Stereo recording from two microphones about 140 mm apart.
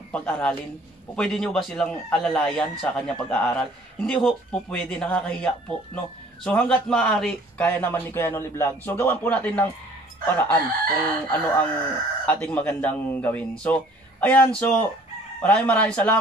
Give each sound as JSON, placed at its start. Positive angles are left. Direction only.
{"t": 0.1, "sound": "speech", "side_deg": 10}